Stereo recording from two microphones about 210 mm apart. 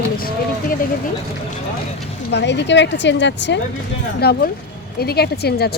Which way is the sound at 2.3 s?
55° left (ahead or behind).